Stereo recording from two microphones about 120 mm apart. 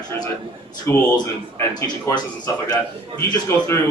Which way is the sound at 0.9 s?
20° left (ahead or behind).